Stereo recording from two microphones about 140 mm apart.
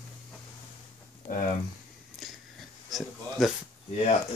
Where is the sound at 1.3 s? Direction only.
65° left (ahead or behind).